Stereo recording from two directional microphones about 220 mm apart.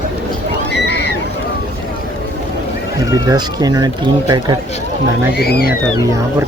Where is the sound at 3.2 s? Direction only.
15° right (ahead or behind).